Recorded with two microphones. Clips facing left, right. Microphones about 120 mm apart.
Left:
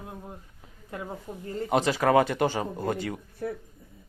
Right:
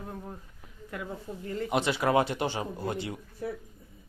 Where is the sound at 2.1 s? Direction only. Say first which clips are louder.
Left 5 dB; 50° left (ahead or behind).